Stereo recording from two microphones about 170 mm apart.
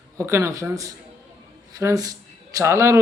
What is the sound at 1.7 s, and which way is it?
Speech, 20° right (ahead or behind).